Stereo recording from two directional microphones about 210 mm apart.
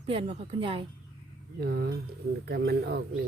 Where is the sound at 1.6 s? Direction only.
50° right (ahead or behind).